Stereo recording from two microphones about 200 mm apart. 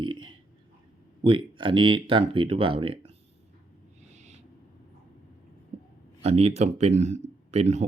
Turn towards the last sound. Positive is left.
turn(degrees=-35)  # may be behind; listen again after turning